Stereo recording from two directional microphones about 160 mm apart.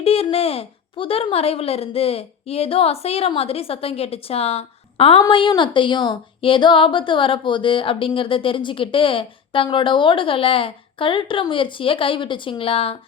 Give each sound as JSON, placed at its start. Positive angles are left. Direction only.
{"t": 0.0, "sound": "speech", "side_deg": 35}